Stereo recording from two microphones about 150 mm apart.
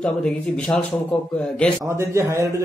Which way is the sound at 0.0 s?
5° left (ahead or behind).